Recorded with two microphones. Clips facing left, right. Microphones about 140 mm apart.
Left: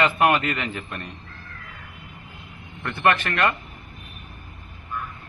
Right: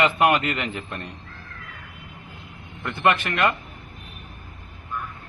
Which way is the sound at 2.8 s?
15° right (ahead or behind).